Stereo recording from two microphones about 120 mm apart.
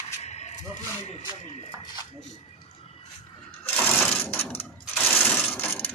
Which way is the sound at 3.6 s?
5° left (ahead or behind).